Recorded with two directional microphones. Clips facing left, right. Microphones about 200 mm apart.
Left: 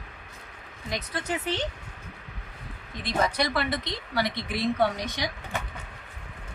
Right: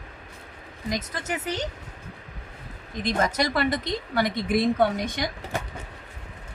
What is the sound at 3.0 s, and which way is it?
A woman's voice, 45° right (ahead or behind).